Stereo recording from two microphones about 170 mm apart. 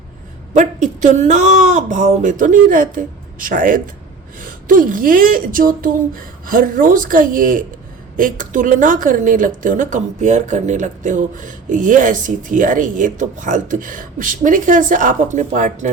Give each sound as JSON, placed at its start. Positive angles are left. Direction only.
{"t": 0.5, "sound": "speech", "side_deg": -45}